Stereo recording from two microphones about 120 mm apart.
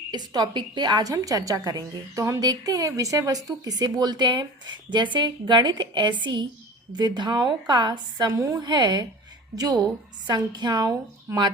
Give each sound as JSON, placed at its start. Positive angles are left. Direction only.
{"t": 0.1, "sound": "a woman's voice", "side_deg": -35}